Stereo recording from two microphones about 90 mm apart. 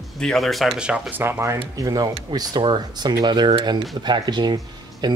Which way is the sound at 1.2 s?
30° right (ahead or behind).